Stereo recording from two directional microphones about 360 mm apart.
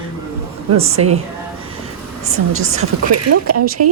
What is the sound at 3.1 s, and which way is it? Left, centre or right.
Speech, right.